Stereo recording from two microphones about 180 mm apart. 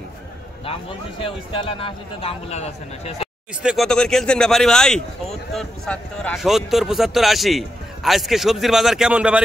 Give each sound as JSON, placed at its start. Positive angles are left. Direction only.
{"t": 0.7, "sound": "speech", "side_deg": 30}
{"t": 3.6, "sound": "speech", "side_deg": 0}